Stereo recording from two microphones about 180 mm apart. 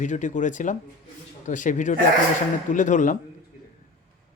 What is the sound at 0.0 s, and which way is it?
Speech, 45° left (ahead or behind).